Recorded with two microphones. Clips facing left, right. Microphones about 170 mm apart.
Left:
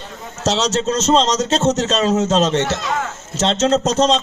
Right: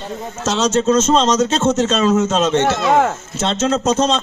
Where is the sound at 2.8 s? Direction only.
55° right (ahead or behind).